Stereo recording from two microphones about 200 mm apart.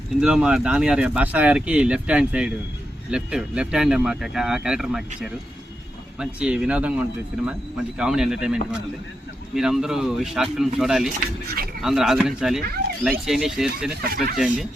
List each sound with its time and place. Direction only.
0.2 s speech: 5° right (ahead or behind)
9.6 s speech: centre (ahead or behind)
14.1 s speech: 50° right (ahead or behind)
14.3 s speech: centre (ahead or behind)